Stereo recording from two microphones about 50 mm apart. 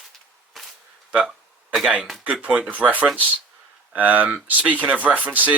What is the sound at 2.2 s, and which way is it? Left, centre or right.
Speech, right.